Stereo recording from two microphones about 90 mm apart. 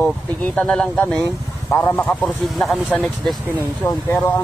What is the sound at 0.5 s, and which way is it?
Speech, 10° left (ahead or behind).